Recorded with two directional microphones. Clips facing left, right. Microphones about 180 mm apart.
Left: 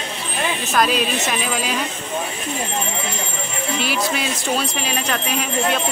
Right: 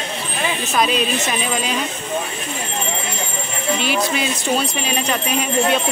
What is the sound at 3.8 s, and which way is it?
Speech, centre (ahead or behind).